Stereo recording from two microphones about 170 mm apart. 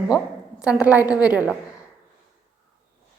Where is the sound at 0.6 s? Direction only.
10° right (ahead or behind).